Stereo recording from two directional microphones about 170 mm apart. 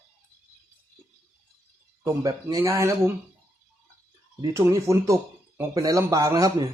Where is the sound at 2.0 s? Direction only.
20° right (ahead or behind).